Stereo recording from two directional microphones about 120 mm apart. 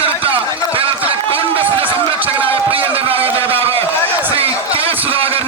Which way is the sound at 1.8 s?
15° right (ahead or behind).